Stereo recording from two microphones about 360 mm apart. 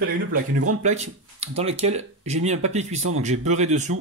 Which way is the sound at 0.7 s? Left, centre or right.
Centre.